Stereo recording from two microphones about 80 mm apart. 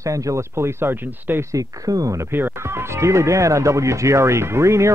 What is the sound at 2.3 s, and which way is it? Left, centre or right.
Speech, right.